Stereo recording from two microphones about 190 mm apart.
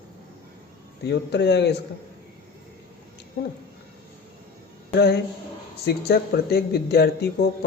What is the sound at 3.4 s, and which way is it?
Speech, 60° left (ahead or behind).